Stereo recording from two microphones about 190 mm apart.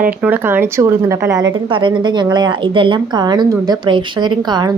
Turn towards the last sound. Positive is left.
turn(degrees=-20)  # may be behind; listen again after turning